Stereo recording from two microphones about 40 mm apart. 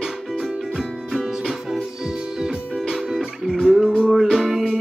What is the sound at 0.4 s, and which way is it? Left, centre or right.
Music, centre.